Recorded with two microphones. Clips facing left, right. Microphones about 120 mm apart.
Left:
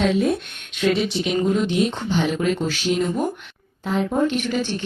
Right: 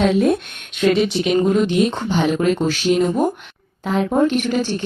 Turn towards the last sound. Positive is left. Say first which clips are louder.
# right 4 dB
turn(degrees=-45)  # may be behind; listen again after turning